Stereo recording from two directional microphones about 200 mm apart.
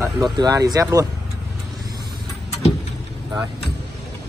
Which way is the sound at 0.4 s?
20° right (ahead or behind).